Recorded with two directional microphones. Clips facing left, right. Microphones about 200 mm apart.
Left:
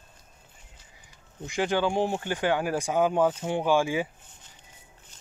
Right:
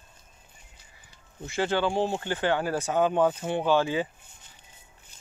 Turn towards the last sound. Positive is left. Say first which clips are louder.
# even
turn(degrees=10)  # may be behind; listen again after turning